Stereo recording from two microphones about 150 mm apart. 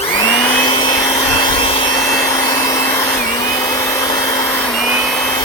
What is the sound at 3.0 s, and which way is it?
Vacuum cleaner, 5° left (ahead or behind).